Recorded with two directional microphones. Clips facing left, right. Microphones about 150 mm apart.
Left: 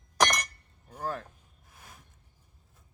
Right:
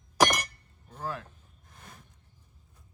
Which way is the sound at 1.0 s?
45° left (ahead or behind).